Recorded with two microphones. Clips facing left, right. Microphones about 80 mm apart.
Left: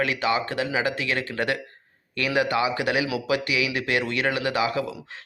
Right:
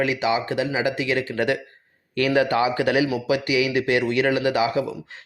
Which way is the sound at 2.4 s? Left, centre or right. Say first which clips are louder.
Even; right.